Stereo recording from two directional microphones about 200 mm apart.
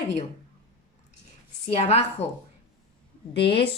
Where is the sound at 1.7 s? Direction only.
30° left (ahead or behind).